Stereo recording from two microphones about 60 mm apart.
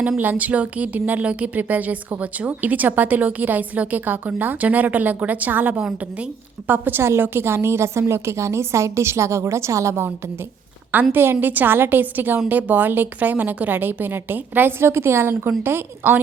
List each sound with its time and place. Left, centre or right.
0.2 s speech: right
5.7 s speech: centre
6.7 s a woman's voice: right
7.0 s a woman's voice: right
11.1 s a woman's voice: right
14.8 s a woman's voice: right